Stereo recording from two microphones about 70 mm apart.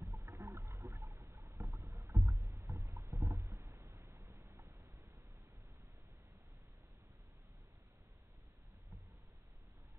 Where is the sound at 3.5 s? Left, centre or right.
Right.